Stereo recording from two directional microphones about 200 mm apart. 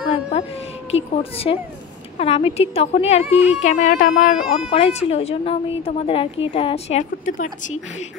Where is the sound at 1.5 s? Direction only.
25° left (ahead or behind).